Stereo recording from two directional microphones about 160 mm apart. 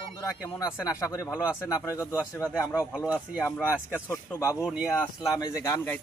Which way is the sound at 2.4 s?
10° right (ahead or behind).